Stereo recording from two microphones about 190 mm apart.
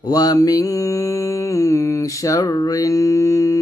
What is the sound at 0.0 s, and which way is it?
Mantra, 20° left (ahead or behind).